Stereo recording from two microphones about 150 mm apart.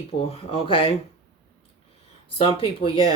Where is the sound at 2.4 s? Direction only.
40° left (ahead or behind).